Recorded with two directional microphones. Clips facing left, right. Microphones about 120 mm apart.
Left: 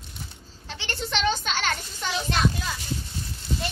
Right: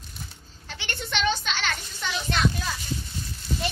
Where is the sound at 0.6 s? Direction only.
30° left (ahead or behind).